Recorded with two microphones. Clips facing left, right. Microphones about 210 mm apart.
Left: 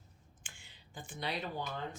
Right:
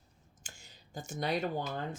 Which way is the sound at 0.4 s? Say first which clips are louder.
Right 5 dB; 40° right (ahead or behind).